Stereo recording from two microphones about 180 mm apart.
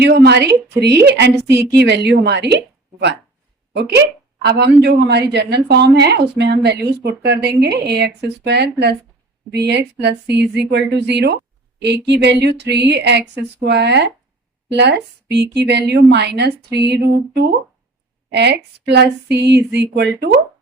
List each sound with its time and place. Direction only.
0.0 s a woman's voice: 65° right (ahead or behind)
3.8 s a woman's voice: 70° right (ahead or behind)